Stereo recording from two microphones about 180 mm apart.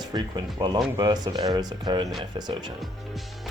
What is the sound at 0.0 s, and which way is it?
Speech, 20° right (ahead or behind).